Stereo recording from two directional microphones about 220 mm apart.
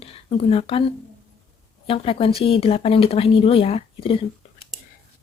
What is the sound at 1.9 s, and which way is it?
A woman's voice, 25° left (ahead or behind).